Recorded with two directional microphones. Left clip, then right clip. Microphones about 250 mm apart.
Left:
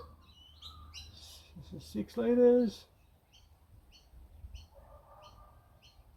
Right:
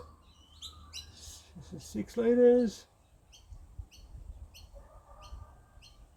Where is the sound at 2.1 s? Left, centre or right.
Right.